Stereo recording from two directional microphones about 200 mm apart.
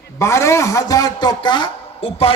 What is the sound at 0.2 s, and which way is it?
A man's voice, 15° left (ahead or behind).